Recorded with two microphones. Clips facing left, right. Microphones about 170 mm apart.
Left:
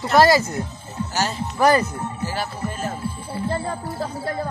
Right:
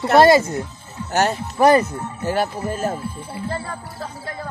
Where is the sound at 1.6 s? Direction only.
25° right (ahead or behind).